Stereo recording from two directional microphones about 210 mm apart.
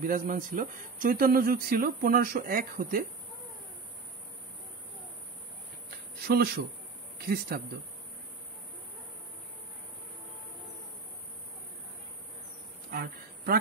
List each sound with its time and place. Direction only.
0.0 s speech: 40° right (ahead or behind)
6.2 s speech: 50° right (ahead or behind)
12.9 s speech: 45° right (ahead or behind)